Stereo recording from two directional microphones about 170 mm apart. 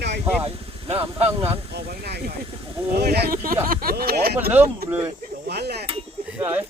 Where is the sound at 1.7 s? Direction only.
75° right (ahead or behind).